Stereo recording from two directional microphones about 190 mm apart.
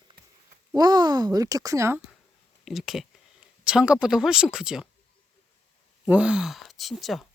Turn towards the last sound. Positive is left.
turn(degrees=0)  # may be behind; listen again after turning